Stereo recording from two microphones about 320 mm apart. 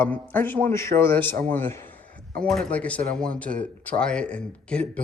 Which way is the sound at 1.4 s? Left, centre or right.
Centre.